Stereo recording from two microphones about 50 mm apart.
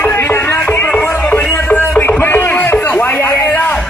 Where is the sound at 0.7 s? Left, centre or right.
Left.